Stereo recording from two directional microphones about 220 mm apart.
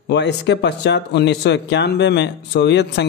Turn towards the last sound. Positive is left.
turn(degrees=50)  # may be behind; listen again after turning